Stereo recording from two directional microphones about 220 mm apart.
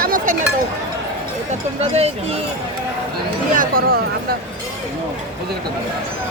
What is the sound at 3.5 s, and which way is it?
Speech, 40° right (ahead or behind).